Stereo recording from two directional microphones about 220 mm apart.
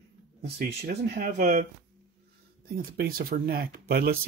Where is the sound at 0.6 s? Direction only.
45° right (ahead or behind).